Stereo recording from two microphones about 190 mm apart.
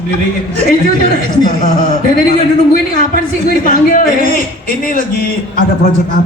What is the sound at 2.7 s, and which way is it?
A man's voice, 50° left (ahead or behind).